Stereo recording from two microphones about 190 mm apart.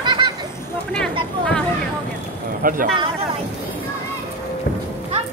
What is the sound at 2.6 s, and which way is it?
Speech, 45° right (ahead or behind).